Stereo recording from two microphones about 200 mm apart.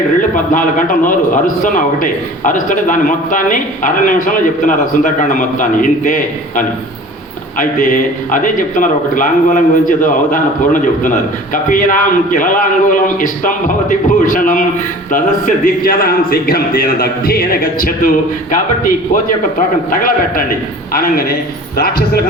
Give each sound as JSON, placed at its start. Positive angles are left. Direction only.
{"t": 0.2, "sound": "a man's voice", "side_deg": 40}
{"t": 19.1, "sound": "a man's voice", "side_deg": 40}